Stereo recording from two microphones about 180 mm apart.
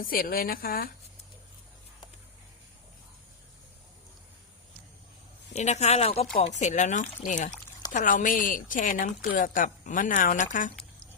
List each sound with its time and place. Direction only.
0.0 s speech: 55° left (ahead or behind)
5.5 s speech: 40° left (ahead or behind)